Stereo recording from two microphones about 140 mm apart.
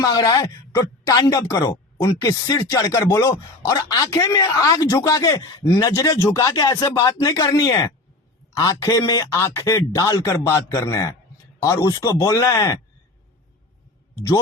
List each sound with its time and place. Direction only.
0.0 s speech: 25° left (ahead or behind)